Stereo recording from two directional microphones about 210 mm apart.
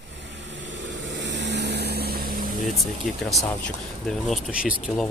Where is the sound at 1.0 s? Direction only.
55° right (ahead or behind).